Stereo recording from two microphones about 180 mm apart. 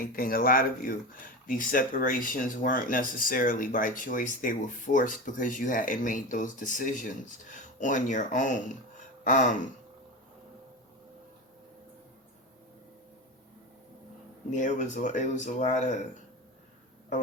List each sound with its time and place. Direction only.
0.1 s speech: 55° left (ahead or behind)
9.2 s a sound: 45° left (ahead or behind)
14.5 s speech: 45° left (ahead or behind)